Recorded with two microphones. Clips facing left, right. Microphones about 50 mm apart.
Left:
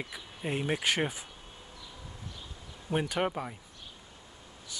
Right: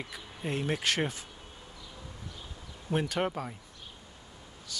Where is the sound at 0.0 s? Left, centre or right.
Centre.